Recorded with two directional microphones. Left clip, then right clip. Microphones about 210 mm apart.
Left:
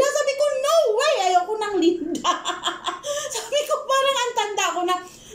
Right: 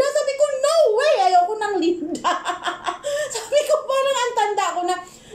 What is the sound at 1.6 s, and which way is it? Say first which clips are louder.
Speech: even; centre (ahead or behind).